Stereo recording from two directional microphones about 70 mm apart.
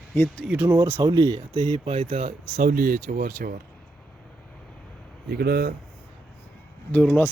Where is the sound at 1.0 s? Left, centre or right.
Right.